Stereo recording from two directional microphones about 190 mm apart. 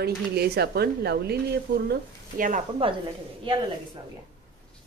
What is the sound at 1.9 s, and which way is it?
Speech, 45° right (ahead or behind).